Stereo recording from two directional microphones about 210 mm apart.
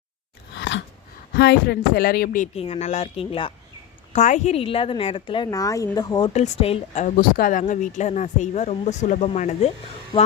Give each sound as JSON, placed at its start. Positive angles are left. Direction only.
{"t": 0.5, "sound": "a sound", "side_deg": 60}
{"t": 1.4, "sound": "speech", "side_deg": 50}
{"t": 2.6, "sound": "a woman's voice", "side_deg": 30}
{"t": 6.3, "sound": "a woman's voice", "side_deg": 35}